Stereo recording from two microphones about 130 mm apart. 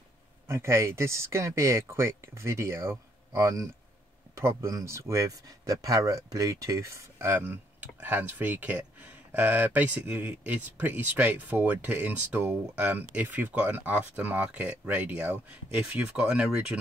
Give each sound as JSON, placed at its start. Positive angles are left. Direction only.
{"t": 0.5, "sound": "speech", "side_deg": -20}